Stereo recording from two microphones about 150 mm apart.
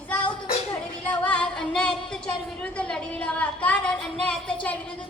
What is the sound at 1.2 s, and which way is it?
Singing, 10° left (ahead or behind).